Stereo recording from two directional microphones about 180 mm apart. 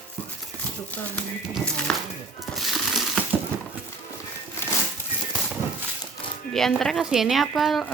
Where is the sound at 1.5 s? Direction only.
5° left (ahead or behind).